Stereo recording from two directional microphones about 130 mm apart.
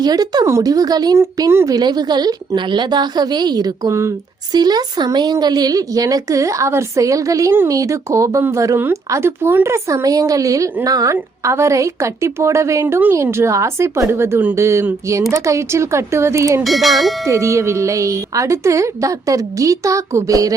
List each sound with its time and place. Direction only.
0.0 s speech: 30° right (ahead or behind)
1.2 s a woman's voice: 20° right (ahead or behind)
16.6 s speech: centre (ahead or behind)
17.2 s speech: 20° right (ahead or behind)